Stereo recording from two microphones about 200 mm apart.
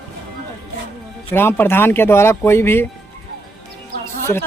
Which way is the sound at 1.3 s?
10° left (ahead or behind).